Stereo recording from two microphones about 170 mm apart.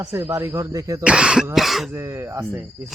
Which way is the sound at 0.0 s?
15° right (ahead or behind).